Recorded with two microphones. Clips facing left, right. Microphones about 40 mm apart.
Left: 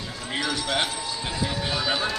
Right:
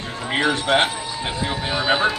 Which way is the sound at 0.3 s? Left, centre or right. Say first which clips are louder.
Right 8 dB; right.